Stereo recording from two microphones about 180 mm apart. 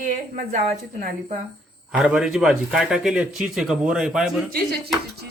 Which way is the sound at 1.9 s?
10° right (ahead or behind).